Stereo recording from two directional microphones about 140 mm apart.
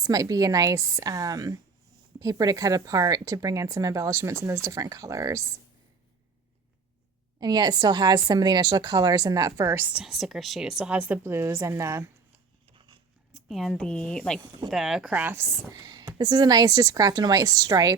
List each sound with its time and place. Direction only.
0.0 s a woman's voice: 25° right (ahead or behind)
7.3 s a woman's voice: 30° right (ahead or behind)
12.7 s a sound: 35° right (ahead or behind)
13.5 s a woman's voice: centre (ahead or behind); by 15.8 s 20° right (ahead or behind)
15.9 s a woman's voice: 30° right (ahead or behind)